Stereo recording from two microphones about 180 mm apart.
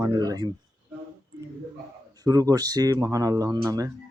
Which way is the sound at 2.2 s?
20° right (ahead or behind).